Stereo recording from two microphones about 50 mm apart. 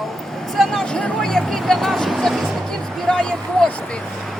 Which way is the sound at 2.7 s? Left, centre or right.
Centre.